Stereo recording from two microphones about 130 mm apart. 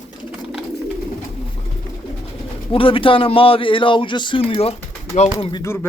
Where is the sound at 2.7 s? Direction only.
45° left (ahead or behind).